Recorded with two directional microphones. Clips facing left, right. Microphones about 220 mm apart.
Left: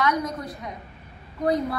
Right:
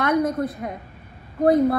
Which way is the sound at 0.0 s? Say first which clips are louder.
Right 5 dB; 55° right (ahead or behind).